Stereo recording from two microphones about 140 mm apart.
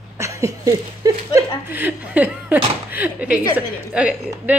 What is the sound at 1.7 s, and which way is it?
A woman's voice, 10° right (ahead or behind).